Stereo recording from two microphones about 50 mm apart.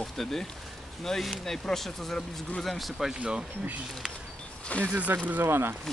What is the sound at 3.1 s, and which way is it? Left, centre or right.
Speech, centre.